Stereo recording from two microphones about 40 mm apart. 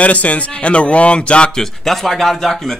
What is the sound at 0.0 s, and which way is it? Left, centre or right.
Speech, left.